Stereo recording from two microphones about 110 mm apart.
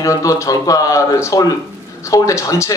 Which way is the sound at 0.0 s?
30° left (ahead or behind).